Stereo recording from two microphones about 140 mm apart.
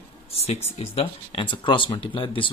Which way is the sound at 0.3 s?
45° left (ahead or behind).